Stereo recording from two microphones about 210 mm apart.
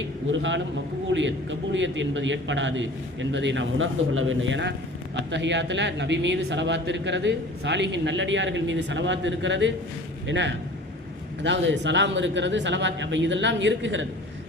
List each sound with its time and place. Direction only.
0.3 s speech: 60° right (ahead or behind)